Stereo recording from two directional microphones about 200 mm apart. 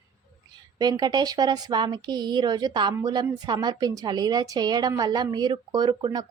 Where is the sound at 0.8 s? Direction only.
20° right (ahead or behind).